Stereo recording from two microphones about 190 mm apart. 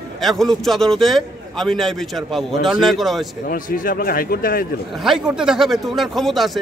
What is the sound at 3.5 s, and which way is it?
Speech, 45° left (ahead or behind).